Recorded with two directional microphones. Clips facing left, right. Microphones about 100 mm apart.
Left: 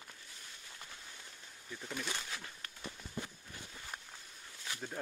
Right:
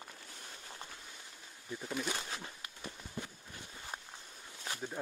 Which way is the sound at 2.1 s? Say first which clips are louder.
Right 3 dB; 25° right (ahead or behind).